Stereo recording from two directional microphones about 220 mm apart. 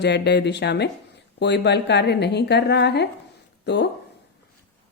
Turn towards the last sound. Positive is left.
turn(degrees=50)  # may be behind; listen again after turning